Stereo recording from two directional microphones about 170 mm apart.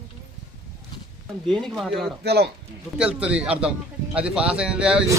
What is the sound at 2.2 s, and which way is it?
Speech, 70° right (ahead or behind).